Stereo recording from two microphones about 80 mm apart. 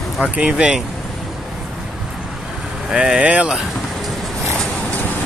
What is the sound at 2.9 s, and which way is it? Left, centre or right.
Speech, centre.